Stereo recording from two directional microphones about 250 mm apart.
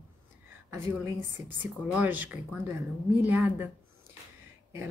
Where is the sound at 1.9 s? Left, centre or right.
Centre.